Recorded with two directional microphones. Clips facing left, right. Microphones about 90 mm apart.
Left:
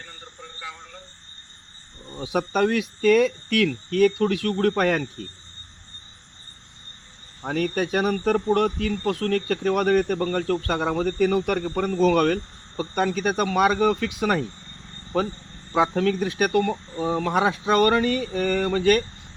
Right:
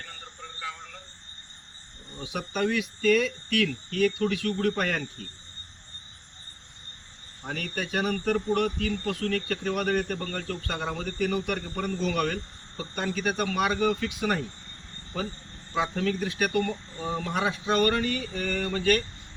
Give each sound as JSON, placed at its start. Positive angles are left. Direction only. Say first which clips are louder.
{"t": 0.6, "sound": "a sound", "louder": "right 1 dB", "side_deg": 5}
{"t": 2.1, "sound": "speech", "louder": "left 8 dB", "side_deg": 50}
{"t": 7.4, "sound": "speech", "louder": "left 9 dB", "side_deg": 45}
{"t": 15.7, "sound": "speech", "louder": "left 6 dB", "side_deg": 50}
{"t": 17.3, "sound": "speech", "louder": "left 5 dB", "side_deg": 50}